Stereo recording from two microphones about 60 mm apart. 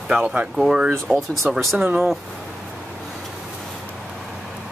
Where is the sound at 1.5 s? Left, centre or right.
Centre.